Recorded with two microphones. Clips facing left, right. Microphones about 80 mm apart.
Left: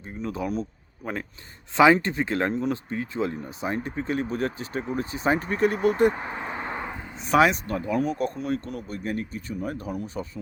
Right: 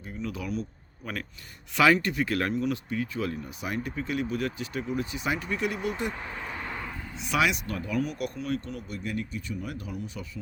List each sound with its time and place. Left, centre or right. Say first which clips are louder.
0.0 s speech: left 4 dB; left
1.0 s speech: left 4 dB; left
6.1 s a sound: left 5 dB; left
7.2 s speech: left 7 dB; left